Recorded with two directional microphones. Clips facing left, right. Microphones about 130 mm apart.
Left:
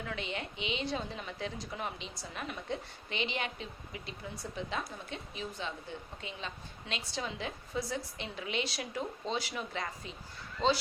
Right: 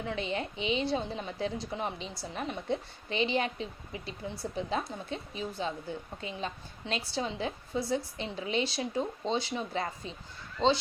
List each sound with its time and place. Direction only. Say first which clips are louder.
0.0 s a woman's voice: right 5 dB; 30° right (ahead or behind)